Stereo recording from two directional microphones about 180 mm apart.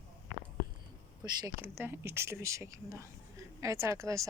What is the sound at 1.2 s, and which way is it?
A woman's voice, 20° right (ahead or behind).